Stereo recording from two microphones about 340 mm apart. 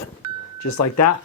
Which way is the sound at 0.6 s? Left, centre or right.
Left.